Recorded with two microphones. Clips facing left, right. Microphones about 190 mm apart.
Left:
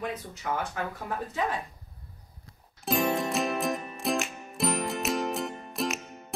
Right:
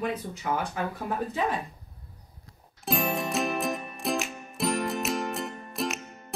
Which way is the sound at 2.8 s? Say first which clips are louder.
Left 2 dB; centre (ahead or behind).